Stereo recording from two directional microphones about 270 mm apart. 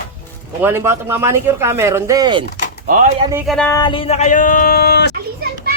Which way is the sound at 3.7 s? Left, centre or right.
Centre.